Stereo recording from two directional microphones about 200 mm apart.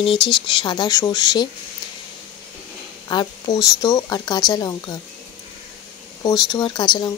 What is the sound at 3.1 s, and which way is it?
Speech, 20° left (ahead or behind).